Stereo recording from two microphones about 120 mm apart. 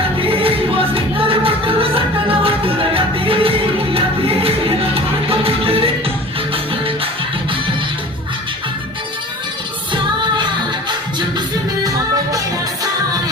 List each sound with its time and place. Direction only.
0.2 s music: 50° right (ahead or behind)
9.9 s music: 40° right (ahead or behind)